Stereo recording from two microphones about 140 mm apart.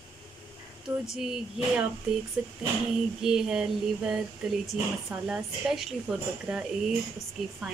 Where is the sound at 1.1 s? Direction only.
5° right (ahead or behind).